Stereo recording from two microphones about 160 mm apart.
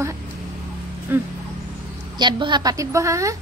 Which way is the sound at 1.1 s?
15° right (ahead or behind).